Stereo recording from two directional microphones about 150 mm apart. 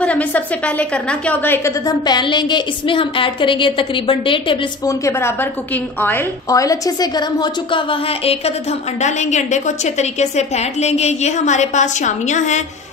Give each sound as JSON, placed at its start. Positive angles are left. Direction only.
{"t": 0.0, "sound": "a woman's voice", "side_deg": 10}
{"t": 1.9, "sound": "a woman's voice", "side_deg": 30}
{"t": 4.8, "sound": "a woman's voice", "side_deg": 20}
{"t": 9.0, "sound": "a woman's voice", "side_deg": 50}